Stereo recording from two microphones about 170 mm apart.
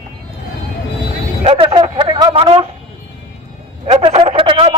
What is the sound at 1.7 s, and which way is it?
Speech, 30° right (ahead or behind).